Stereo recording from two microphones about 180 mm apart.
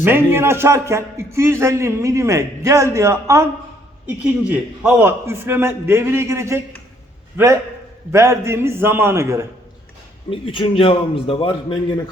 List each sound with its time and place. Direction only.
0.0 s a man's voice: 15° right (ahead or behind)
4.2 s a man's voice: 5° right (ahead or behind)
10.2 s a man's voice: 30° left (ahead or behind)